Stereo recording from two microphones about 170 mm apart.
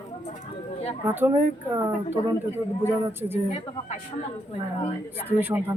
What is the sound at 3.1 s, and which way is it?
Speech, 15° right (ahead or behind).